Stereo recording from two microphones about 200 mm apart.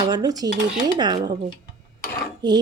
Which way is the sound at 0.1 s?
20° right (ahead or behind).